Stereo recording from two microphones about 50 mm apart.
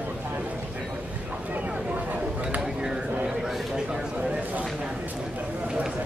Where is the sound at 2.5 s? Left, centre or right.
Centre.